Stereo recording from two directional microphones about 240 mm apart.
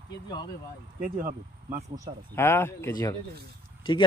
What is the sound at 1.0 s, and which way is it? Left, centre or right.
Speech, right.